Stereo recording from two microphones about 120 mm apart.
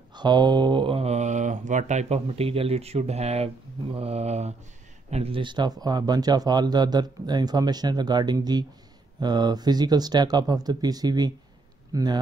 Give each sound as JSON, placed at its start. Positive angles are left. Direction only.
{"t": 0.1, "sound": "speech", "side_deg": -40}
{"t": 5.1, "sound": "a man's voice", "side_deg": -50}